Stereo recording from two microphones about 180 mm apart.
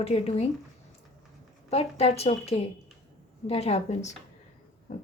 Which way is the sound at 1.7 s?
35° left (ahead or behind).